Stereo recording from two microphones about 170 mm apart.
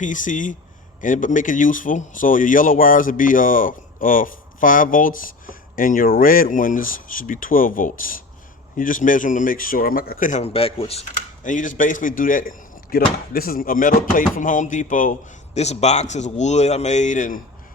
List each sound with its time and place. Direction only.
0.0 s speech: 50° left (ahead or behind)
11.4 s speech: 50° left (ahead or behind)